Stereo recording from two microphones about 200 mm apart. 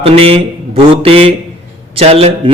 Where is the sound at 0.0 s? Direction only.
30° right (ahead or behind).